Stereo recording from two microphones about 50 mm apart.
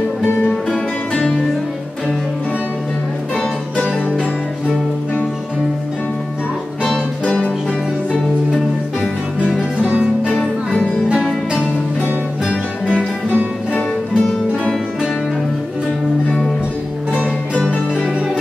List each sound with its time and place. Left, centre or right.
9.8 s music: right
13.3 s music: left
17.6 s music: centre